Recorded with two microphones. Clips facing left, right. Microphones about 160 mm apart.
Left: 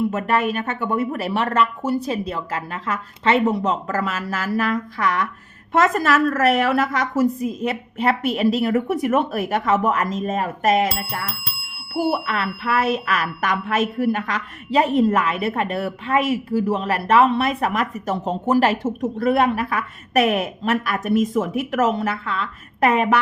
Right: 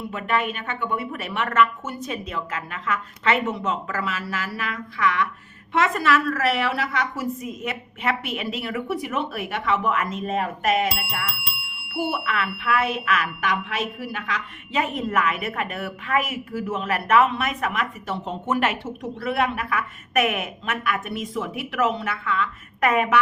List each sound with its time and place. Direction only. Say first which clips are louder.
0.1 s speech: left 5 dB; 40° left (ahead or behind)